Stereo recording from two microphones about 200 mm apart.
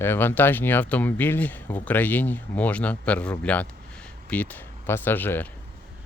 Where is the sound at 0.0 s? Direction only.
10° left (ahead or behind).